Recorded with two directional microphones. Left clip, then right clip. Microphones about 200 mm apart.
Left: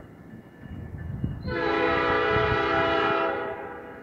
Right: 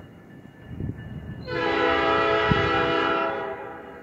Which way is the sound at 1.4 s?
50° right (ahead or behind).